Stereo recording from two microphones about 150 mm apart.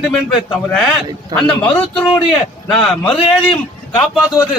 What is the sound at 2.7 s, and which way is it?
Speech, 5° left (ahead or behind).